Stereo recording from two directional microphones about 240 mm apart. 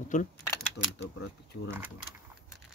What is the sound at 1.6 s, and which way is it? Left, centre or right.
Speech, centre.